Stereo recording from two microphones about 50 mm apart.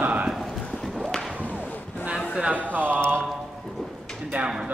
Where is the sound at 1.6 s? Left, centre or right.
Left.